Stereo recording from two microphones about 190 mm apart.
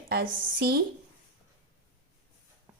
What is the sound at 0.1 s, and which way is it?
Speech, 55° right (ahead or behind).